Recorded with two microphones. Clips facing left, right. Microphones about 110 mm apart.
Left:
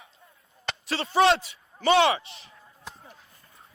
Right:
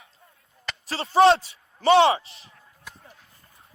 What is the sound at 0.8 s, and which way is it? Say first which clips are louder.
A man's voice: right 4 dB; 35° right (ahead or behind).